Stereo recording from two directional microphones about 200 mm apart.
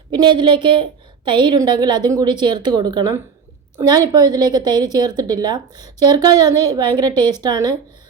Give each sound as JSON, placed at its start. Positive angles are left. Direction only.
{"t": 0.1, "sound": "a woman's voice", "side_deg": -25}